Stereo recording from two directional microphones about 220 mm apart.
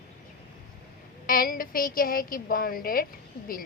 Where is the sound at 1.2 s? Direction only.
40° left (ahead or behind).